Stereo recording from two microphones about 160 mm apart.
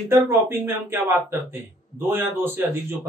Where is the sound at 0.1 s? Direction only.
15° right (ahead or behind).